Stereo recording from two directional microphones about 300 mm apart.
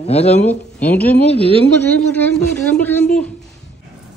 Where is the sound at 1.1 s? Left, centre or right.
Centre.